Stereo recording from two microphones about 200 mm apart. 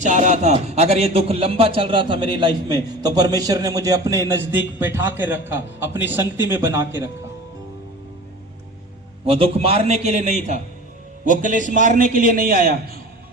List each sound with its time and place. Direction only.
0.0 s a man's voice: 35° right (ahead or behind); by 7.1 s 10° right (ahead or behind)
9.2 s a man's voice: 30° right (ahead or behind); by 13.0 s 45° right (ahead or behind)